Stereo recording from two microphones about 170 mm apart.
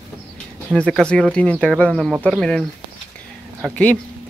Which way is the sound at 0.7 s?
5° left (ahead or behind).